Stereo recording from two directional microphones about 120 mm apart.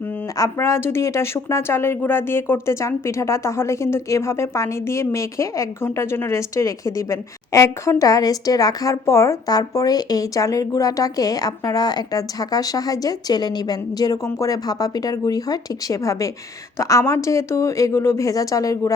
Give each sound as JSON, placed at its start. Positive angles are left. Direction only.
{"t": 0.3, "sound": "speech", "side_deg": 25}